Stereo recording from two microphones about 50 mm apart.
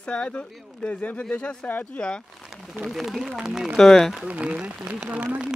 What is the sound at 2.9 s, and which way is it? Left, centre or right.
Speech, centre.